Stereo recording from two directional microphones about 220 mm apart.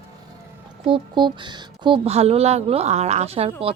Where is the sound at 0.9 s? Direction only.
20° right (ahead or behind).